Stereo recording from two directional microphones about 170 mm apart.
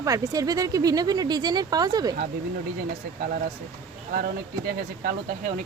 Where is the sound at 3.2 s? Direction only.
60° right (ahead or behind).